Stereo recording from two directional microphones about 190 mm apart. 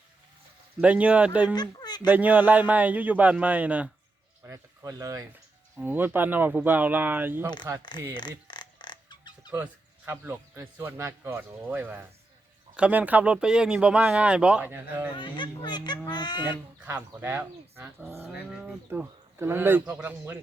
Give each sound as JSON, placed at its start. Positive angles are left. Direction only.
{"t": 0.8, "sound": "speech", "side_deg": -5}
{"t": 1.5, "sound": "a sound", "side_deg": 20}
{"t": 2.0, "sound": "speech", "side_deg": -10}
{"t": 7.8, "sound": "a child's voice", "side_deg": 25}
{"t": 8.4, "sound": "a sound", "side_deg": 25}
{"t": 10.1, "sound": "speech", "side_deg": -10}
{"t": 15.2, "sound": "a child's voice", "side_deg": 25}
{"t": 16.8, "sound": "speech", "side_deg": -10}